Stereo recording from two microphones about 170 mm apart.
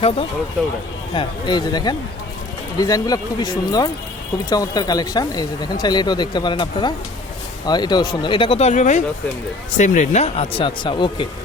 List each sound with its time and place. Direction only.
1.1 s speech: 25° left (ahead or behind)